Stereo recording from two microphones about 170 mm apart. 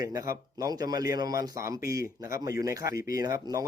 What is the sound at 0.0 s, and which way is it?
Speech, 20° right (ahead or behind).